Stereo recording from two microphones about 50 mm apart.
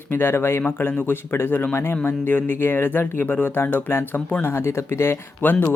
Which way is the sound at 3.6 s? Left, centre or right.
Left.